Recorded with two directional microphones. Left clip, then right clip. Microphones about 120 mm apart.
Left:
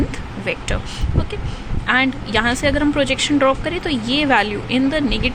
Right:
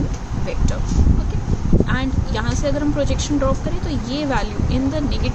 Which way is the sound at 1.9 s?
30° left (ahead or behind).